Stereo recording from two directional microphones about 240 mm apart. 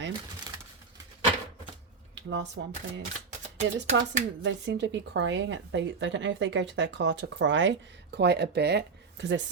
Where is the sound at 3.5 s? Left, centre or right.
Right.